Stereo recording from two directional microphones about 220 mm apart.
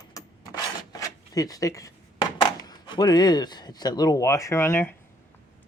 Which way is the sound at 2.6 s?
20° left (ahead or behind).